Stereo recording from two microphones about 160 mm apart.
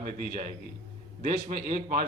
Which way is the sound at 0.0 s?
55° right (ahead or behind).